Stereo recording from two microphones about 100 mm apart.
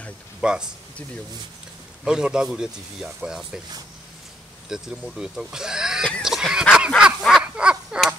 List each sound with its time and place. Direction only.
0.4 s speech: 10° right (ahead or behind)
2.0 s speech: 10° right (ahead or behind)
4.6 s speech: 5° right (ahead or behind)
6.2 s goose: 5° right (ahead or behind)
7.0 s a sound: 5° right (ahead or behind)